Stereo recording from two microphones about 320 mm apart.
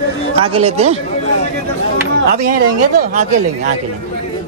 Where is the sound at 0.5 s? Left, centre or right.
Centre.